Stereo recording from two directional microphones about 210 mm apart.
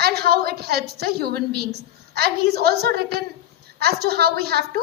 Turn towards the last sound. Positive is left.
turn(degrees=-50)  # may be behind; listen again after turning